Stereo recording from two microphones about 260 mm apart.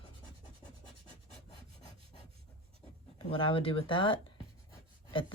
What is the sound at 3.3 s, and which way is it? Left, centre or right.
Speech, centre.